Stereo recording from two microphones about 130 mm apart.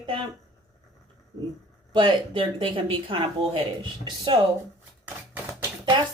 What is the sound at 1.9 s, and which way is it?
Speech, 40° right (ahead or behind).